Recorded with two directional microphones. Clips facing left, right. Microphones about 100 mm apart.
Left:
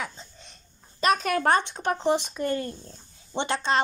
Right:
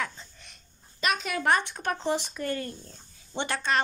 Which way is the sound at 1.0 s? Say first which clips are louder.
Left 6 dB; 45° left (ahead or behind).